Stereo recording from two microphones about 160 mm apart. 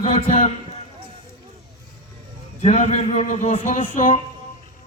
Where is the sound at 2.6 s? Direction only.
40° left (ahead or behind).